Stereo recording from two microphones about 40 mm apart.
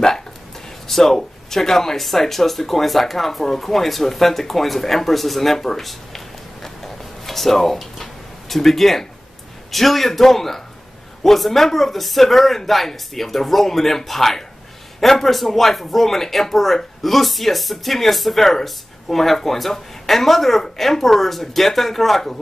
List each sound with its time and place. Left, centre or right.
0.8 s speech: centre